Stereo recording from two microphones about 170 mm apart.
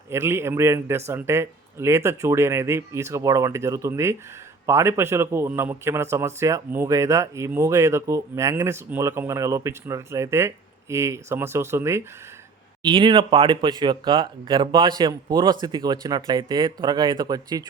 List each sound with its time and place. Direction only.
0.1 s a man's voice: 15° right (ahead or behind)
12.8 s speech: 25° right (ahead or behind)